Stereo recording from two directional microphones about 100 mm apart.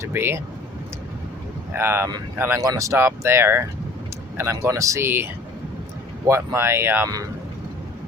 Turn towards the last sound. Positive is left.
turn(degrees=-25)  # may be behind; listen again after turning